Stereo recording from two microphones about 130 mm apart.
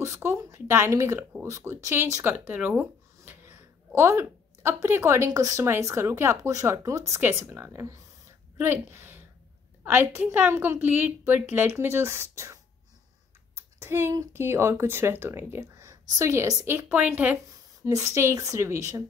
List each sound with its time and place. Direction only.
0.0 s a woman's voice: 20° right (ahead or behind)
13.6 s typing: 20° right (ahead or behind)
14.3 s speech: 20° right (ahead or behind)